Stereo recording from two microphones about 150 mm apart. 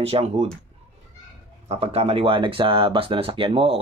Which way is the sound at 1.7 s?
40° right (ahead or behind).